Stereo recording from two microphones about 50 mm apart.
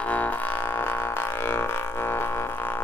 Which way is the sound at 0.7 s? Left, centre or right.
Left.